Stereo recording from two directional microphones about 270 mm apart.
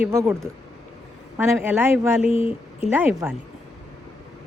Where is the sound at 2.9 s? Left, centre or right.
Centre.